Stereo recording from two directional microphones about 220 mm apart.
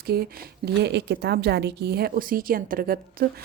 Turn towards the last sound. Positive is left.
turn(degrees=-40)  # may be behind; listen again after turning